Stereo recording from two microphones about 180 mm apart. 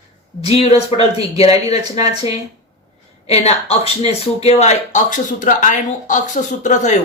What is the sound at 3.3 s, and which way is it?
A woman's voice, 35° left (ahead or behind).